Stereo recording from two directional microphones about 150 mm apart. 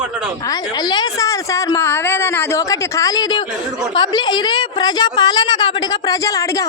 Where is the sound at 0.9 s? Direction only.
25° left (ahead or behind).